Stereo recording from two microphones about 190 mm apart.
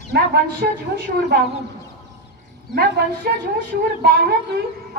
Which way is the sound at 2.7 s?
55° right (ahead or behind).